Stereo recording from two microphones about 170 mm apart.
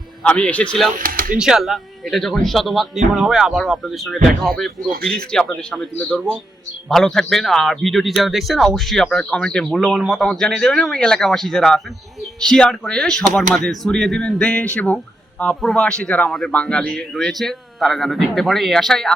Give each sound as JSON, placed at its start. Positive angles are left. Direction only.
{"t": 0.2, "sound": "speech", "side_deg": 5}
{"t": 0.9, "sound": "speech", "side_deg": -55}
{"t": 1.4, "sound": "speech", "side_deg": -5}